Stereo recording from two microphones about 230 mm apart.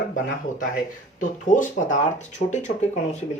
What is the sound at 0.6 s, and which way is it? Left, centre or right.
Speech, left.